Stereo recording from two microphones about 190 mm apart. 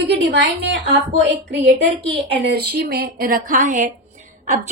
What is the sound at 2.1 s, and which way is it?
A woman's voice, 60° right (ahead or behind).